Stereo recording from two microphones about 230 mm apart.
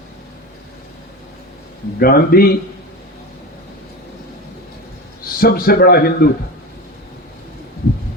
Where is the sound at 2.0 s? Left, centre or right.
Left.